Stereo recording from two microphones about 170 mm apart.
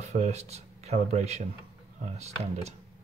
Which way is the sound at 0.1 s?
40° right (ahead or behind).